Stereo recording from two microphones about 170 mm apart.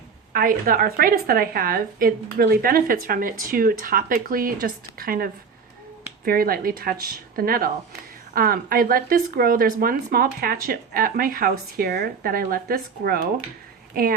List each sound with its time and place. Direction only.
0.3 s a woman's voice: 55° right (ahead or behind)